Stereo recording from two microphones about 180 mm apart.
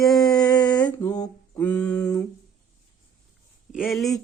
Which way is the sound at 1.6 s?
5° left (ahead or behind).